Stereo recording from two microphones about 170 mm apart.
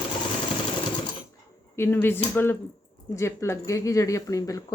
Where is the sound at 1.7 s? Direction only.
15° left (ahead or behind).